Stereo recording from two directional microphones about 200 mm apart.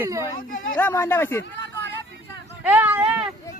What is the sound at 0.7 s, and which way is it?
Speech, 10° left (ahead or behind).